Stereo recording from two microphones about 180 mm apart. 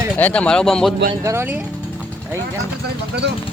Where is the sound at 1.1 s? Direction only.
15° right (ahead or behind).